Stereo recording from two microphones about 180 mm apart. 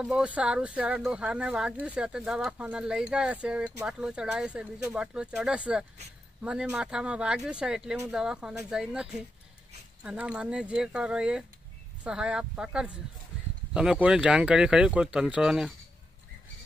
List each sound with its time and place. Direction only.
0.0 s speech: 5° right (ahead or behind)